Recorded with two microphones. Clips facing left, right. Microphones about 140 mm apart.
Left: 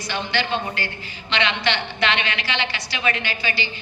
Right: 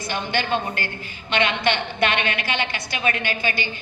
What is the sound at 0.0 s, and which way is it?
A man's voice, 50° right (ahead or behind).